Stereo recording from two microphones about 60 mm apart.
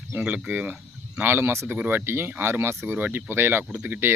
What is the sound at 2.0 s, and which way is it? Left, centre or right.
Speech, right.